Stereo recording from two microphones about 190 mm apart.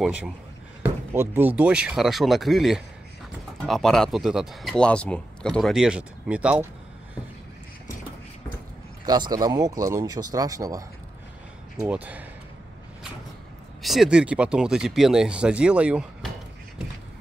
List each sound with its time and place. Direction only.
0.0 s speech: 5° right (ahead or behind)
9.0 s speech: 20° right (ahead or behind)
11.8 s speech: 10° right (ahead or behind)
13.8 s speech: centre (ahead or behind)